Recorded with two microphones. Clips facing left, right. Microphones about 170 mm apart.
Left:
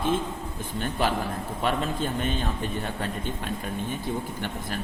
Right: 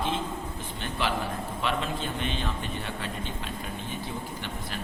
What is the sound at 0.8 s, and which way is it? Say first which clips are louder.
A man's voice: left 4 dB; 45° left (ahead or behind).